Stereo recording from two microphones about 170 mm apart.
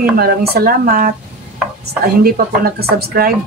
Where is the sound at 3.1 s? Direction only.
60° right (ahead or behind).